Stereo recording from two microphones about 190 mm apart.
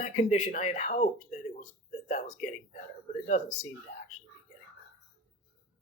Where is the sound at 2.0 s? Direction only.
40° left (ahead or behind).